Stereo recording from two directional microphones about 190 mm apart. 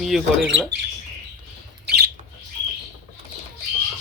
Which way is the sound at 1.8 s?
55° right (ahead or behind).